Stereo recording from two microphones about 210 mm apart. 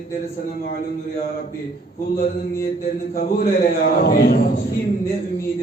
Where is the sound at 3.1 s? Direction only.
45° left (ahead or behind).